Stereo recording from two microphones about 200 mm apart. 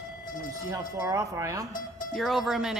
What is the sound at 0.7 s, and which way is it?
Speech, 15° right (ahead or behind).